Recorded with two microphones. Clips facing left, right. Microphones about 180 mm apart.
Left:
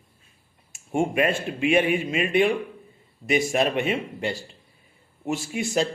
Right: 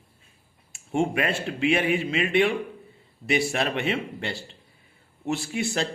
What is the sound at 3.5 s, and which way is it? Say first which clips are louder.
Speech: left 3 dB; 15° left (ahead or behind).